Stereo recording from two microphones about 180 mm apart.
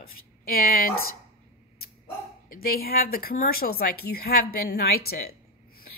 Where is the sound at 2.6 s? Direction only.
55° left (ahead or behind).